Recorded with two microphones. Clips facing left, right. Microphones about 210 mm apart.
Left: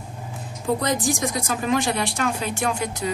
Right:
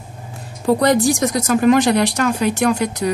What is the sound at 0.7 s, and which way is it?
A woman's voice, 70° right (ahead or behind).